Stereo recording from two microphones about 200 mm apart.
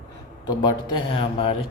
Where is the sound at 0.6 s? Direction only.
25° left (ahead or behind).